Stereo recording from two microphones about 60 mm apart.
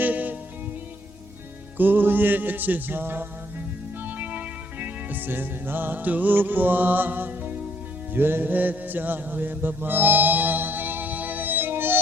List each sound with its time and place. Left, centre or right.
0.0 s music: right
1.8 s music: right
4.0 s music: right
8.1 s mantra: right